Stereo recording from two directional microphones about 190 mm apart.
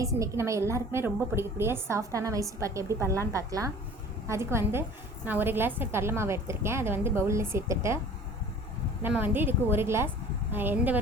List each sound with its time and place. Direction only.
0.0 s a woman's voice: 15° right (ahead or behind)
9.0 s a woman's voice: 10° right (ahead or behind)